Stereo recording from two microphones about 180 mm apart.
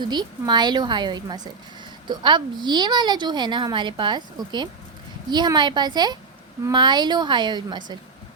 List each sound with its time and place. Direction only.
0.0 s a woman's voice: 25° right (ahead or behind)